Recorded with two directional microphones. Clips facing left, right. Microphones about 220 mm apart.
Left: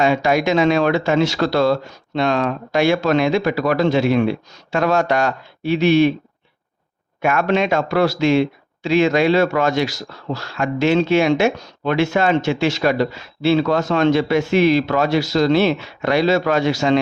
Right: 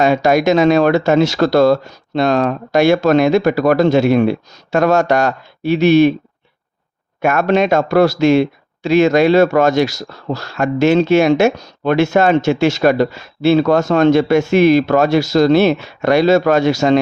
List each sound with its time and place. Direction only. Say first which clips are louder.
0.0 s speech: right 4 dB; 40° right (ahead or behind)
7.2 s speech: right 4 dB; 45° right (ahead or behind)